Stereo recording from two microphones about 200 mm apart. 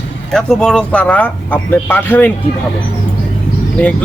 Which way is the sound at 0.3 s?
5° left (ahead or behind).